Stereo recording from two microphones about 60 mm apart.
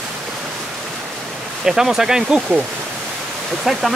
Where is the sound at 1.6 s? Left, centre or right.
Centre.